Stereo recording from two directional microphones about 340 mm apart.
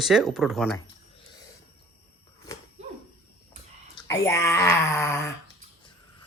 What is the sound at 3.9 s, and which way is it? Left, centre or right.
Speech, centre.